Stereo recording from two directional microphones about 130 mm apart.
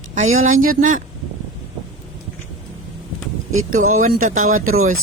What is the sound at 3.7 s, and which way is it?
Speech, 85° right.